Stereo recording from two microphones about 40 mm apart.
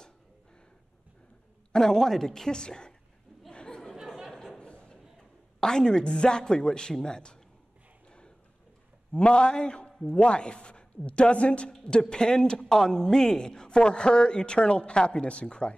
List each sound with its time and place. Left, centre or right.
1.7 s a woman's voice: centre
3.5 s chatter: left
4.6 s a sound: left
5.6 s speech: centre
9.1 s speech: left